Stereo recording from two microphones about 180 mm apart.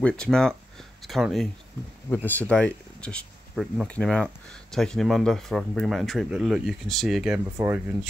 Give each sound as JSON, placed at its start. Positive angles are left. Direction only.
{"t": 0.0, "sound": "speech", "side_deg": 5}
{"t": 7.5, "sound": "speech", "side_deg": -15}